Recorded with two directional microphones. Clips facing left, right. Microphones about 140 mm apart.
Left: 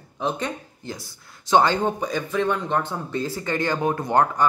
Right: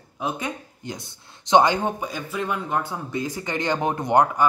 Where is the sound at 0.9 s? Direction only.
20° right (ahead or behind).